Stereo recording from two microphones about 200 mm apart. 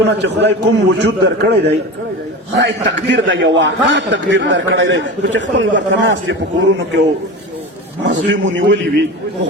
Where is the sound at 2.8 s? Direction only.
65° right (ahead or behind).